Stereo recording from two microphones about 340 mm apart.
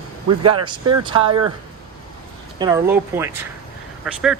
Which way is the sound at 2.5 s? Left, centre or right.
Centre.